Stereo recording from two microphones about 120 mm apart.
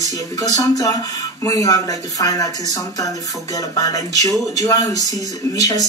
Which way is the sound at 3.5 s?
30° left (ahead or behind).